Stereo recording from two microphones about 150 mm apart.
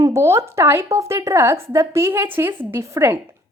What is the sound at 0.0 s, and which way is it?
A woman's voice, 20° right (ahead or behind).